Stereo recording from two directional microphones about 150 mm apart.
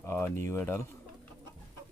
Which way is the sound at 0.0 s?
15° left (ahead or behind).